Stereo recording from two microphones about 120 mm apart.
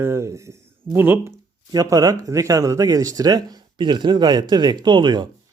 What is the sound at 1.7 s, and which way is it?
Speech, 30° right (ahead or behind).